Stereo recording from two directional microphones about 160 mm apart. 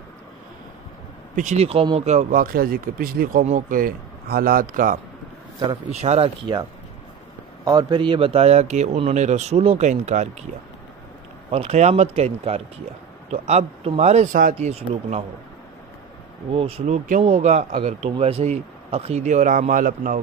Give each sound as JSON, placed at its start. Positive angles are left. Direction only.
{"t": 1.3, "sound": "speech", "side_deg": -50}
{"t": 5.7, "sound": "speech", "side_deg": -40}
{"t": 7.6, "sound": "speech", "side_deg": -25}
{"t": 11.5, "sound": "speech", "side_deg": -40}
{"t": 14.7, "sound": "speech", "side_deg": -40}
{"t": 16.5, "sound": "speech", "side_deg": -35}